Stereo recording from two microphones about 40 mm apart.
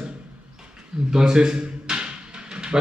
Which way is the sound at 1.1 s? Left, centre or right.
Centre.